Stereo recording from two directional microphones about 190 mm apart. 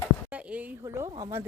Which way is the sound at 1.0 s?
20° right (ahead or behind).